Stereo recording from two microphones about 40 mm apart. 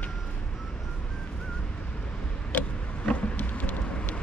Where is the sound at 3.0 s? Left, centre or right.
Left.